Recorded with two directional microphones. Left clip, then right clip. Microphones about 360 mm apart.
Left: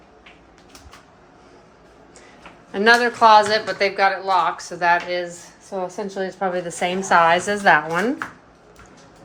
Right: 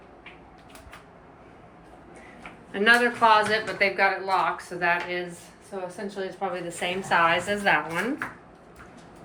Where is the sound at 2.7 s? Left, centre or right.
Centre.